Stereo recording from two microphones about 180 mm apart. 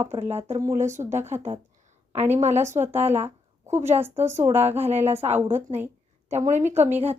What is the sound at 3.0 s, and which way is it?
Speech, 35° right (ahead or behind).